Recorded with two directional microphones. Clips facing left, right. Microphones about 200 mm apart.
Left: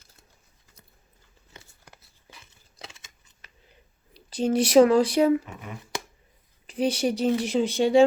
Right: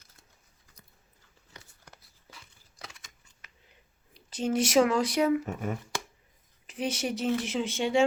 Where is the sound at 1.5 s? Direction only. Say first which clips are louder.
Left 2 dB; 25° left (ahead or behind).